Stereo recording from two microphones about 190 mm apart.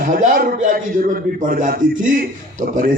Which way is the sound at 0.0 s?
45° right (ahead or behind).